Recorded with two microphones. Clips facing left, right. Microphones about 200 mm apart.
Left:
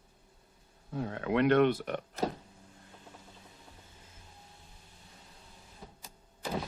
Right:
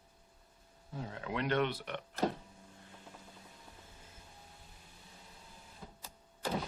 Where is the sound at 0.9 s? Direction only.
60° left (ahead or behind); by 2.1 s 45° left (ahead or behind).